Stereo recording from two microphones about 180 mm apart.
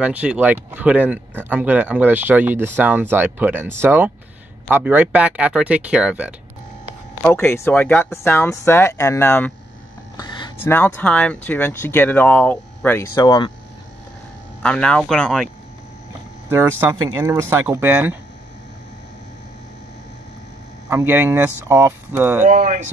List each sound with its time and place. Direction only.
0.0 s speech: 5° right (ahead or behind)
7.2 s speech: 10° left (ahead or behind)
10.1 s a sound: 25° left (ahead or behind)
10.6 s speech: 10° left (ahead or behind)
14.6 s speech: 5° left (ahead or behind)
16.4 s speech: 15° right (ahead or behind)
20.9 s speech: 10° right (ahead or behind)
22.4 s speech: 45° right (ahead or behind)